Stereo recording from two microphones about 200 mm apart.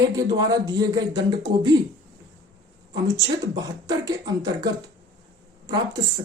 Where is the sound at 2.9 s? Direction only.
20° right (ahead or behind).